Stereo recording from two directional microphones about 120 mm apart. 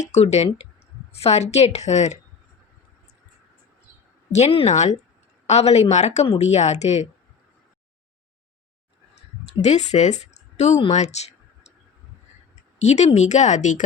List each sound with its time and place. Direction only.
0.0 s a woman's voice: 70° left (ahead or behind)
4.4 s a woman's voice: 65° left (ahead or behind); by 4.9 s 80° left
5.5 s a woman's voice: 65° left (ahead or behind)
9.6 s speech: 70° left (ahead or behind)
10.8 s clicking: 70° left (ahead or behind)
12.8 s a woman's voice: 75° left (ahead or behind)